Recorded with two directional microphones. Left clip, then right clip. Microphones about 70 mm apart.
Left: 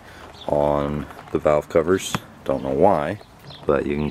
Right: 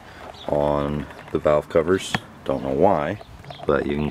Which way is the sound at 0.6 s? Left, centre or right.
Centre.